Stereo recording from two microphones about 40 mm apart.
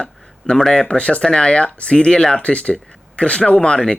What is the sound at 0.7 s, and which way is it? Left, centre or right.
Speech, left.